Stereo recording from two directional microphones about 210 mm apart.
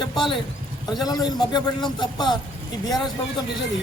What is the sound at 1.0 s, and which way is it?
A man's voice, 20° left (ahead or behind).